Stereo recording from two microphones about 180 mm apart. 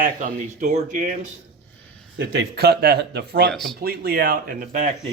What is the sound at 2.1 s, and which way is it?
Speech, 65° right (ahead or behind).